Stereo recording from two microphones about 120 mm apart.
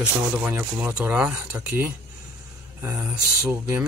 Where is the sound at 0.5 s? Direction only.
15° right (ahead or behind).